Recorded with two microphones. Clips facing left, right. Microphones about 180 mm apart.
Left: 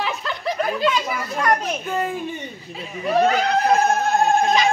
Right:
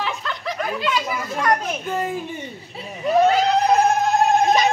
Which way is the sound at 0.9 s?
Centre (ahead or behind).